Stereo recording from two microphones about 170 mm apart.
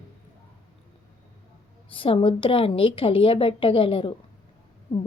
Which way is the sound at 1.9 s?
30° left (ahead or behind).